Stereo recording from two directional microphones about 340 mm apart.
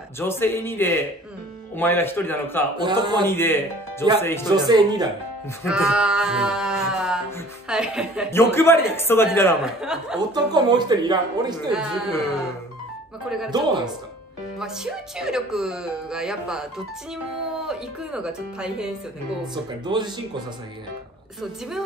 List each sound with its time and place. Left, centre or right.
0.2 s a man's voice: centre
2.8 s speech: centre
3.3 s a man's voice: centre
4.5 s speech: centre
5.6 s a sound: centre
10.3 s speech: centre
11.7 s speech: centre
14.6 s speech: centre
19.4 s speech: centre
21.4 s speech: centre